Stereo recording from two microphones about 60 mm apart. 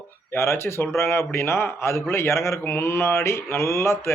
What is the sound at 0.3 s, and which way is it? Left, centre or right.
A man's voice, left.